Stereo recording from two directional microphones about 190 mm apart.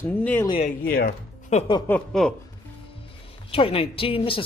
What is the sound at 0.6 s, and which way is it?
Speech, 50° left (ahead or behind).